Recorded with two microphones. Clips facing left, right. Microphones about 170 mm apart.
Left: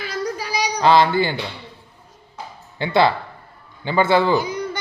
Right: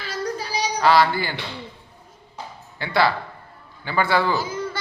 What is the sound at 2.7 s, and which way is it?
Speech, 25° left (ahead or behind).